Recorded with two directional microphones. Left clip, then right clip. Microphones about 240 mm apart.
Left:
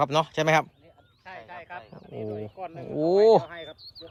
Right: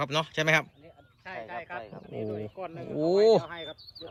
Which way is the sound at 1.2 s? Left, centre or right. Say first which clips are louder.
Right 3 dB; right.